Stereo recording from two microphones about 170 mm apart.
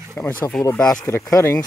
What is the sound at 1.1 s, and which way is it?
Speech, 15° left (ahead or behind).